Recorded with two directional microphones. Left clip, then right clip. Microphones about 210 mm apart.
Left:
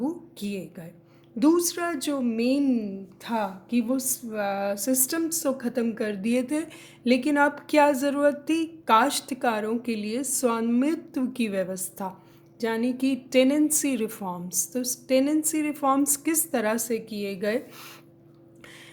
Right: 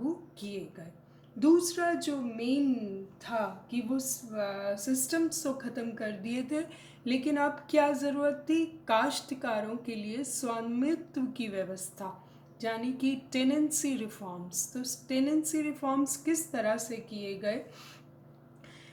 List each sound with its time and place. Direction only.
0.3 s a woman's voice: 50° left (ahead or behind)